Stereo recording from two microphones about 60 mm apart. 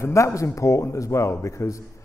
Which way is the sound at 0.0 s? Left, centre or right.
Left.